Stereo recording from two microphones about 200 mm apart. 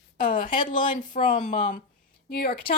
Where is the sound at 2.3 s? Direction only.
50° left (ahead or behind).